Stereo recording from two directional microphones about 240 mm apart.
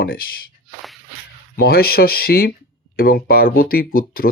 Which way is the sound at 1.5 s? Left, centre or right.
Left.